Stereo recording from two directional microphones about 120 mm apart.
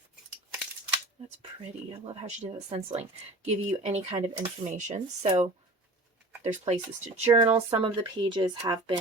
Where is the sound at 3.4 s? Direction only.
70° right (ahead or behind).